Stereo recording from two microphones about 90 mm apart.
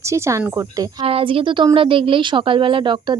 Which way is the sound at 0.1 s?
35° right (ahead or behind).